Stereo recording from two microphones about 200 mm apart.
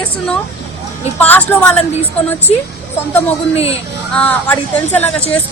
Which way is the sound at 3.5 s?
30° left (ahead or behind).